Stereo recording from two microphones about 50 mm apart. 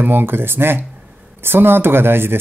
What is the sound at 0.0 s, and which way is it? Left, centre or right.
Speech, right.